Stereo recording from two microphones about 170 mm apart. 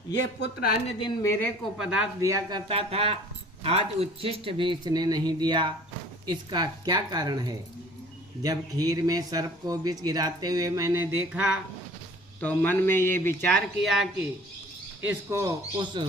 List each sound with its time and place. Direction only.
0.9 s a woman's voice: 30° left (ahead or behind)
1.2 s speech: 15° left (ahead or behind)
1.8 s speech: 5° right (ahead or behind)
2.2 s speech: 20° right (ahead or behind)
2.6 s speech: 35° right (ahead or behind); by 11.6 s 5° right (ahead or behind)
12.4 s speech: 10° left (ahead or behind)
13.8 s speech: centre (ahead or behind)
15.0 s speech: 15° right (ahead or behind)